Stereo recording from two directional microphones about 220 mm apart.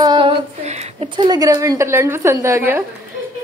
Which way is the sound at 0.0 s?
20° right (ahead or behind).